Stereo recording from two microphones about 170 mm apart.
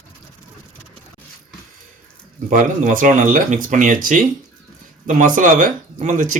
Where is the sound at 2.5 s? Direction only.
50° right (ahead or behind).